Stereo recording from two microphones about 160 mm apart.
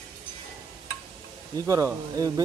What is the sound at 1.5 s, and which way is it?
Speech, 20° right (ahead or behind).